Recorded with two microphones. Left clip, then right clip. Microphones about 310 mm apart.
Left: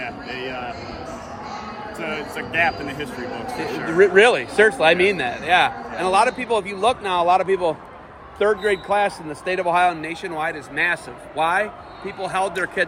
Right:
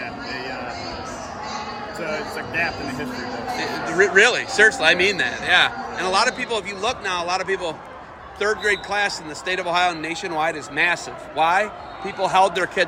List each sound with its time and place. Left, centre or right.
3.9 s a man's voice: centre